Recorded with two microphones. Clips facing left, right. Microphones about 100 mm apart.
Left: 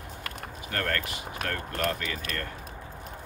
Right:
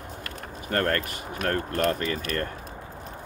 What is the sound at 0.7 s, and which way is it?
Speech, 45° right (ahead or behind).